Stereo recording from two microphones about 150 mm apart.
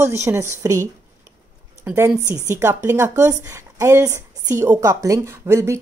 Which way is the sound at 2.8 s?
20° right (ahead or behind).